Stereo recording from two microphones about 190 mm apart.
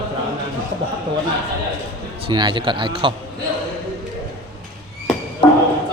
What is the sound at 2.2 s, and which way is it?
Speech, 25° right (ahead or behind).